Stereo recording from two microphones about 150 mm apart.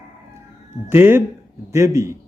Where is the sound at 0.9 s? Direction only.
15° right (ahead or behind).